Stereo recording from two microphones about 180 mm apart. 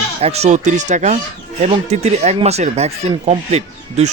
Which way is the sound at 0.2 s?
35° right (ahead or behind).